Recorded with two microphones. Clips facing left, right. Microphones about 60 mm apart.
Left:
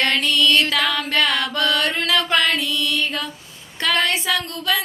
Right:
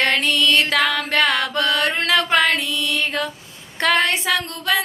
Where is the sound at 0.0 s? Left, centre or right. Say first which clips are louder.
Even; right.